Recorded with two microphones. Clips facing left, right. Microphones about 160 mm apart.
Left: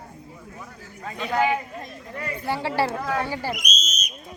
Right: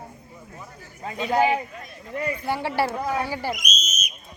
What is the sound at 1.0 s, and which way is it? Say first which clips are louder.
Speech: right 3 dB; 25° right (ahead or behind).